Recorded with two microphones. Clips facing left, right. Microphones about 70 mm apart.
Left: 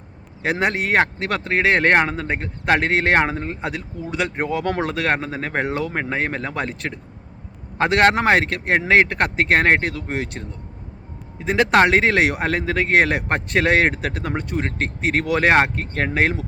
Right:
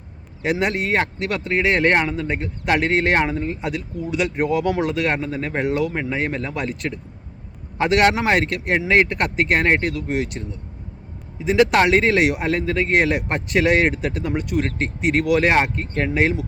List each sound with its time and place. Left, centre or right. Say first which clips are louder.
0.4 s speech: even; left
11.4 s speech: even; left